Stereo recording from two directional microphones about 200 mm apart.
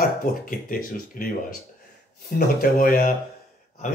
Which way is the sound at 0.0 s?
45° left (ahead or behind).